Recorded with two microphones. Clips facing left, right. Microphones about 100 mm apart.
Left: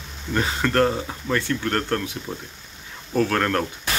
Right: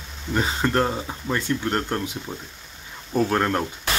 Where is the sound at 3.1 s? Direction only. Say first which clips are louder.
Even; 15° right (ahead or behind).